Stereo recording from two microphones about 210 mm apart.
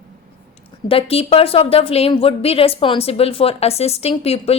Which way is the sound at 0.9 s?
25° left (ahead or behind).